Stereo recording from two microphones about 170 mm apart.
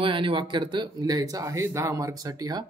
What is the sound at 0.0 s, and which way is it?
Speech, 30° right (ahead or behind).